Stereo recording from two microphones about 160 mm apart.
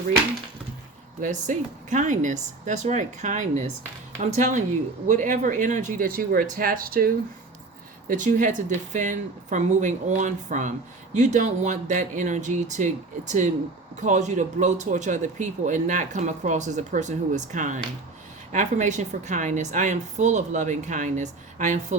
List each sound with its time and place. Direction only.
1.2 s speech: 50° right (ahead or behind)
8.0 s speech: 55° right (ahead or behind)